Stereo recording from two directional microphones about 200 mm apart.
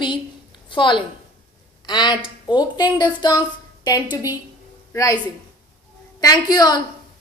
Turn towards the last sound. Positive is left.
turn(degrees=20)  # may be behind; listen again after turning